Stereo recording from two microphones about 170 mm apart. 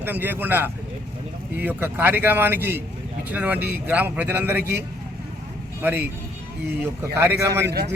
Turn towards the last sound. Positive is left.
turn(degrees=-75)  # may be behind; listen again after turning